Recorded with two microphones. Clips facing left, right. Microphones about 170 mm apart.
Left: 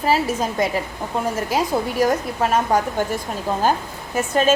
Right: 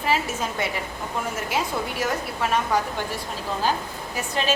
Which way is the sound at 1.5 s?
40° left (ahead or behind).